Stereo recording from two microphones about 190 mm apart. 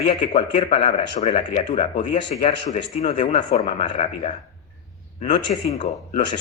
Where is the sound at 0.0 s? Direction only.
40° left (ahead or behind).